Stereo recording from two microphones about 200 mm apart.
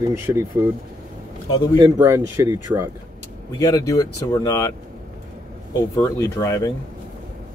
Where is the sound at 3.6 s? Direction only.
15° left (ahead or behind).